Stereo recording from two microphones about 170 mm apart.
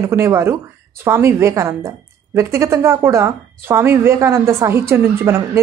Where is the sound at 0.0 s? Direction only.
15° right (ahead or behind).